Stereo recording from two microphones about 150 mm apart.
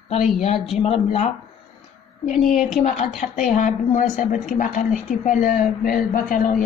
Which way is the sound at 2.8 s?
55° left (ahead or behind).